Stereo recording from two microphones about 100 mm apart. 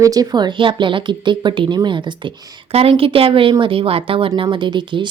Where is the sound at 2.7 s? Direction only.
80° right.